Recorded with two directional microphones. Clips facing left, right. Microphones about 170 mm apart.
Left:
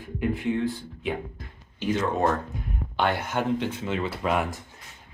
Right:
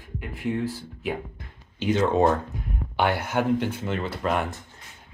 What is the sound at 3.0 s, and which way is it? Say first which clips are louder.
Speech: right 2 dB; 5° right (ahead or behind).